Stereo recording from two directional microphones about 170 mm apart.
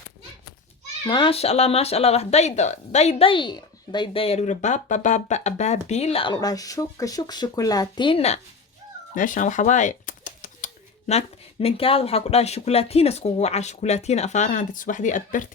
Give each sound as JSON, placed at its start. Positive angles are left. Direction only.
{"t": 1.0, "sound": "speech", "side_deg": 30}
{"t": 9.1, "sound": "speech", "side_deg": 50}